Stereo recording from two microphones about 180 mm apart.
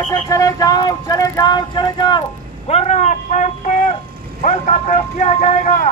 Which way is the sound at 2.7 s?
40° left (ahead or behind).